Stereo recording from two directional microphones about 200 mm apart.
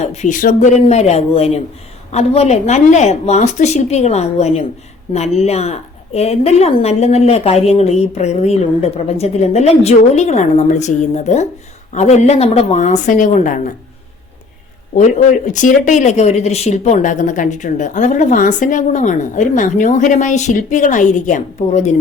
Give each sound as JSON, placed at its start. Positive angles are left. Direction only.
{"t": 0.0, "sound": "speech", "side_deg": 35}
{"t": 15.4, "sound": "speech", "side_deg": 40}